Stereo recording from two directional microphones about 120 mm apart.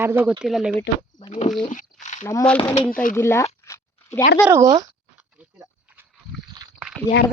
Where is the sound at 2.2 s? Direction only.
25° left (ahead or behind).